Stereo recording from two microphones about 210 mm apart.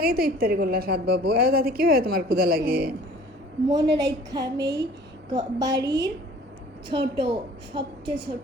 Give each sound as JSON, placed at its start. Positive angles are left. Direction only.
{"t": 0.0, "sound": "a woman's voice", "side_deg": -45}
{"t": 3.7, "sound": "a woman's voice", "side_deg": -15}
{"t": 7.2, "sound": "a woman's voice", "side_deg": -25}